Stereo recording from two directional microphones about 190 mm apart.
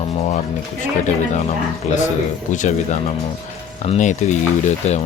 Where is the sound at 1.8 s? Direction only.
40° left (ahead or behind).